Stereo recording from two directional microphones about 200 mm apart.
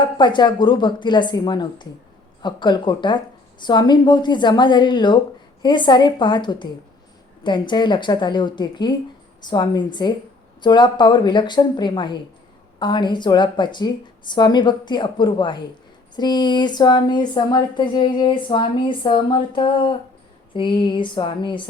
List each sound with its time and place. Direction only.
0.2 s speech: 20° left (ahead or behind)